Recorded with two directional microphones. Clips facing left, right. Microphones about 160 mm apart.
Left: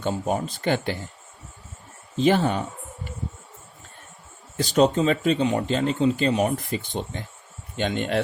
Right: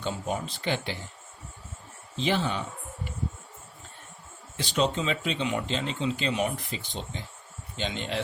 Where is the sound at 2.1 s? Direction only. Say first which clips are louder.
Left 7 dB; 50° left (ahead or behind).